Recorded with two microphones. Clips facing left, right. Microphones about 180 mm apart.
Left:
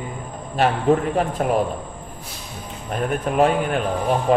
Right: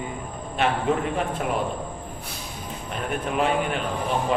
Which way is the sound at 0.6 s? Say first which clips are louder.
Left 5 dB; 40° left (ahead or behind).